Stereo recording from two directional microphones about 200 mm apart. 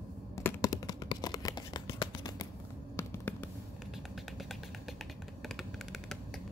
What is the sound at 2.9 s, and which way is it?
Fireworks, 10° left (ahead or behind).